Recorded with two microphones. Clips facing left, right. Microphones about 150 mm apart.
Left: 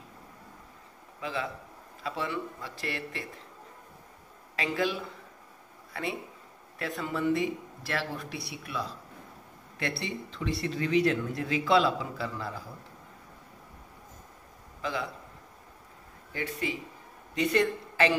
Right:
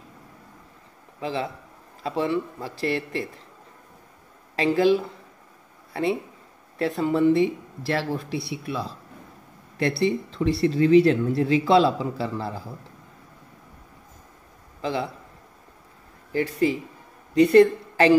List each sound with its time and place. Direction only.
1.2 s speech: 30° right (ahead or behind)
4.6 s speech: 35° right (ahead or behind)
6.8 s speech: 30° right (ahead or behind)
14.8 s a man's voice: 30° right (ahead or behind)
16.6 s a woman's voice: 35° right (ahead or behind)